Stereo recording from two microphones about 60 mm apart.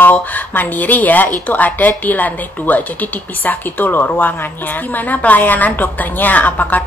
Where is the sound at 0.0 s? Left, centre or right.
Left.